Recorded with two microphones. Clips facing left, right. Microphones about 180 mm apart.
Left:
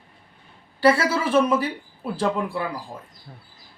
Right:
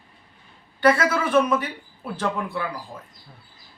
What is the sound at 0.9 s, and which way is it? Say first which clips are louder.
A man's voice: even; 30° left (ahead or behind).